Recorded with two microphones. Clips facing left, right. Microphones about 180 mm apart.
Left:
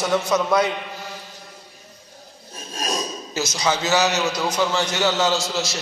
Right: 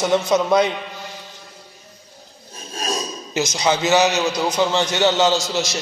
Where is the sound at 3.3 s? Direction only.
15° right (ahead or behind).